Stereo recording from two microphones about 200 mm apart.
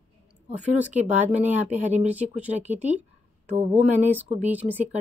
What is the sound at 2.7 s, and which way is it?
Speech, 35° right (ahead or behind).